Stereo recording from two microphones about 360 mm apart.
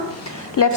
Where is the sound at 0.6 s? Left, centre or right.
Left.